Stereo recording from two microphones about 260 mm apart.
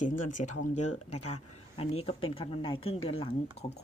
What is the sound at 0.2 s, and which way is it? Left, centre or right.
Speech, left.